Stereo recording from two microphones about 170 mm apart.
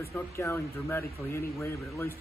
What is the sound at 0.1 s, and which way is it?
Speech, 15° left (ahead or behind).